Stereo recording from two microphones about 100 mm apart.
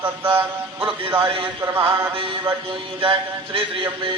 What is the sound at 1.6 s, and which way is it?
Speech, 20° right (ahead or behind).